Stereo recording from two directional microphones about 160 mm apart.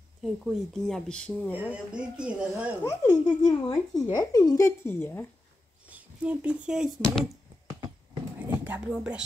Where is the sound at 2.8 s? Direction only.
25° left (ahead or behind).